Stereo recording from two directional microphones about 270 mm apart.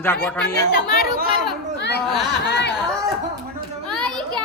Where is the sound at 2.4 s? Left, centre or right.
Left.